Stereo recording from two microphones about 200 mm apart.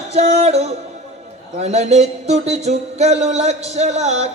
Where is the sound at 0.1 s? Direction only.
35° right (ahead or behind).